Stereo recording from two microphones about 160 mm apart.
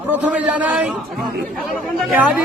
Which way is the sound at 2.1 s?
10° right (ahead or behind).